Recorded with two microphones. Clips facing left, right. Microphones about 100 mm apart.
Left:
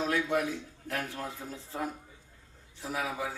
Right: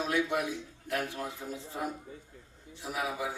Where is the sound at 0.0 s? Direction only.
15° right (ahead or behind).